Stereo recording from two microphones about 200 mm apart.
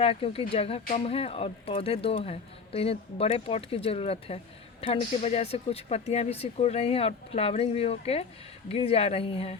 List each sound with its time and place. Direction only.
0.0 s speech: 30° left (ahead or behind)